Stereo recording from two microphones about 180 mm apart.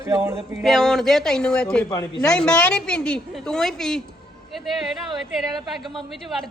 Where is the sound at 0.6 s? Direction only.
Centre (ahead or behind).